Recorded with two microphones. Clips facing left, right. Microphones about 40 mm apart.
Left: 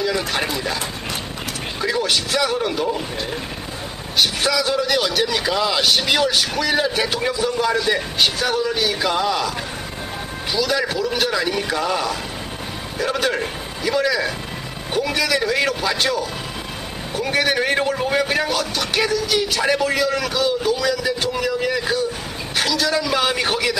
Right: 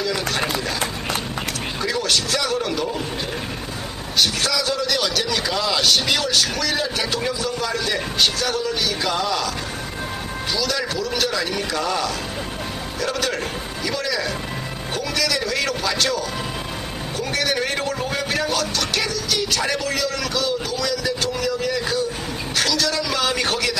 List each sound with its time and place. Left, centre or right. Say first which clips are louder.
0.0 s speech: left 2 dB; centre
1.8 s speech: left 2 dB; centre
4.2 s speech: left 2 dB; centre
10.5 s speech: left 4 dB; centre